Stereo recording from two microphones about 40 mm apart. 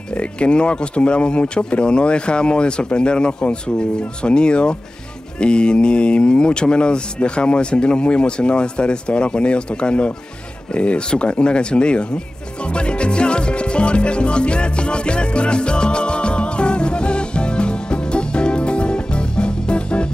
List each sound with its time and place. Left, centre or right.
0.2 s speech: left
12.7 s music: left